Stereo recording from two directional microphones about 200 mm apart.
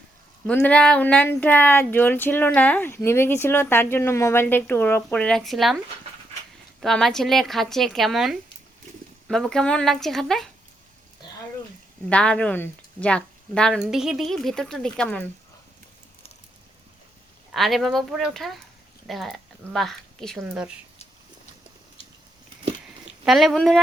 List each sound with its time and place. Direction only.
0.4 s speech: 5° left (ahead or behind)
6.7 s speech: centre (ahead or behind)
12.0 s speech: 5° left (ahead or behind)
17.5 s a woman's voice: centre (ahead or behind)
22.0 s a sound: 25° left (ahead or behind)
23.2 s speech: centre (ahead or behind)